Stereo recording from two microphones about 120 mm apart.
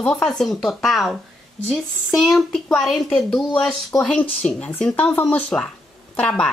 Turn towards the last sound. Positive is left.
turn(degrees=10)  # may be behind; listen again after turning